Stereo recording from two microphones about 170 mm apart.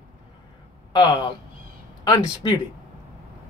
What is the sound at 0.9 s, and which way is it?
Speech, 25° left (ahead or behind).